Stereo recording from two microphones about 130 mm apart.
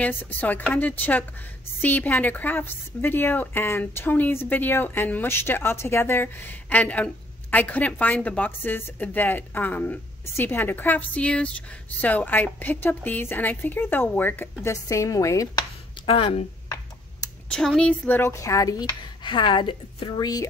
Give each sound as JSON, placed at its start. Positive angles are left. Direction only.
{"t": 0.0, "sound": "a woman's voice", "side_deg": 15}
{"t": 16.1, "sound": "speech", "side_deg": 45}
{"t": 17.5, "sound": "speech", "side_deg": 5}